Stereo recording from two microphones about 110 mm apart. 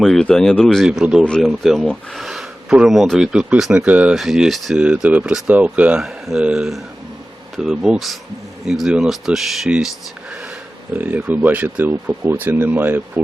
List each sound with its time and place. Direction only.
0.0 s speech: 5° left (ahead or behind)
1.2 s speech: 5° left (ahead or behind); by 4.1 s 15° right (ahead or behind)
4.1 s speech: 5° right (ahead or behind)
10.9 s speech: 15° right (ahead or behind)